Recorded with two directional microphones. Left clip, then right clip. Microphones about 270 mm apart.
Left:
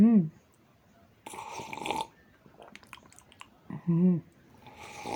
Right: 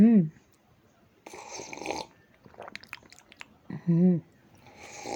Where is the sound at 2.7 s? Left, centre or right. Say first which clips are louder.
Right 6 dB; centre.